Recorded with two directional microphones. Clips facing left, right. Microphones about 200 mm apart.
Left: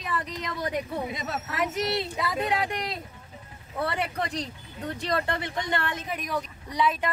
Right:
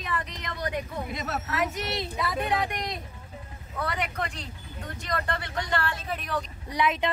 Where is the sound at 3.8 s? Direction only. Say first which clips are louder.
Left 2 dB; 30° left (ahead or behind); by 6.4 s 10° left (ahead or behind).